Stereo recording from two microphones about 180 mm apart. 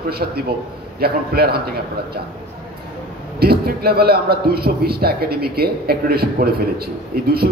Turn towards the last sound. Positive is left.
turn(degrees=-60)  # may be behind; listen again after turning